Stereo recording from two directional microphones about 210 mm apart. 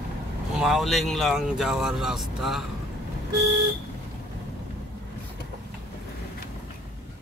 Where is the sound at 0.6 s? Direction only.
Centre (ahead or behind).